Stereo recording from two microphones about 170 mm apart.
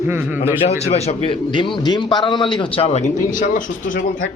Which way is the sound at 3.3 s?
50° left (ahead or behind).